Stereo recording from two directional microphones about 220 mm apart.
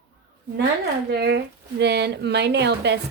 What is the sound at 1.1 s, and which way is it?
Speech, 50° right (ahead or behind).